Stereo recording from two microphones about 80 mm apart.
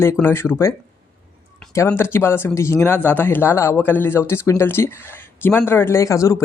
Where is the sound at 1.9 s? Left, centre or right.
Left.